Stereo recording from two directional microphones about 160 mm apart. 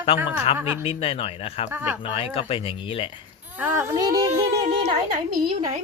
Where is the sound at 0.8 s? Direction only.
35° left (ahead or behind).